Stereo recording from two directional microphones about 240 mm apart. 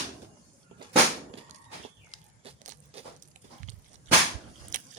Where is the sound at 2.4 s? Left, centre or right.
Right.